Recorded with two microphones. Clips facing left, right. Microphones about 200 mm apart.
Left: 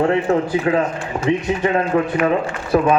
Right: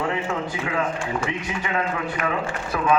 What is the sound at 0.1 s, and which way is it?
A man's voice, 35° left (ahead or behind).